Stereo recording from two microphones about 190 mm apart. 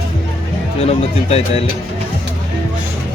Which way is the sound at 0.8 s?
30° left (ahead or behind).